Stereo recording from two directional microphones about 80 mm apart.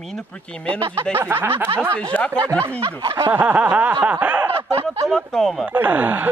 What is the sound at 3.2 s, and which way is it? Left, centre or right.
Speech, right.